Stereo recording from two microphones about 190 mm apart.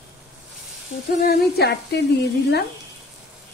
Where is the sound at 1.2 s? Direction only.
55° left (ahead or behind).